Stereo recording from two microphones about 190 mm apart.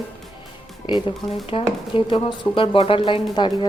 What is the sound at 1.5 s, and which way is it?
Speech, 25° left (ahead or behind).